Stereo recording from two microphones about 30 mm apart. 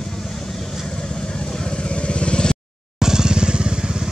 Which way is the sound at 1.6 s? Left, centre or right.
Left.